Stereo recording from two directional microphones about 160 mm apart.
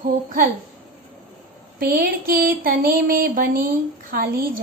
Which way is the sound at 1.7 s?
65° right (ahead or behind).